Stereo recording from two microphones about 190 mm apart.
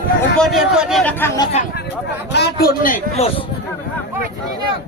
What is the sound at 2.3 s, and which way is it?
Speech, 55° left (ahead or behind).